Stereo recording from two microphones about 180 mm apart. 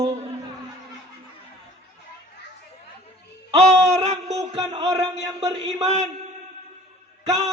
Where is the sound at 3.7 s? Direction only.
35° right (ahead or behind).